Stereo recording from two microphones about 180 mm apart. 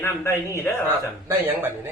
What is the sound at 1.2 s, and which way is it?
Speech, 10° right (ahead or behind).